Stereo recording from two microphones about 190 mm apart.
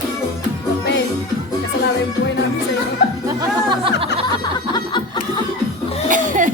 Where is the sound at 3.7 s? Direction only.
30° right (ahead or behind).